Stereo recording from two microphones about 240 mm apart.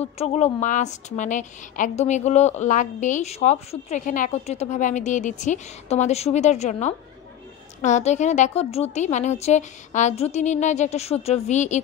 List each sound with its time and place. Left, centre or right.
0.0 s a woman's voice: left